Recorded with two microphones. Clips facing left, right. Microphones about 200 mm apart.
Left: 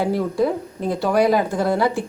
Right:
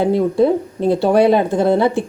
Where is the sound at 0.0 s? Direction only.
25° right (ahead or behind).